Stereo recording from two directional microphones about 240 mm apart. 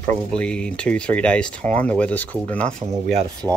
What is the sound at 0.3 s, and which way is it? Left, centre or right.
Speech, centre.